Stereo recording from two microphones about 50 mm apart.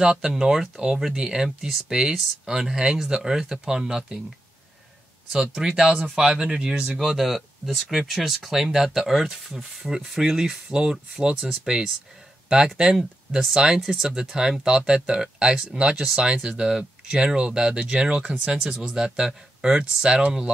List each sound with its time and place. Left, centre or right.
0.0 s speech: centre
5.3 s speech: centre